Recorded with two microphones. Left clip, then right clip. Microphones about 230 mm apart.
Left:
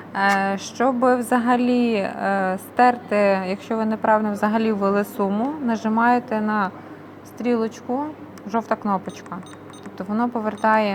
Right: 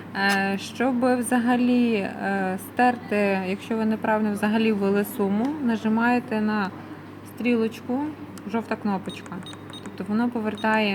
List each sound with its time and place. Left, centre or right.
0.1 s a woman's voice: centre
10.1 s a woman's voice: centre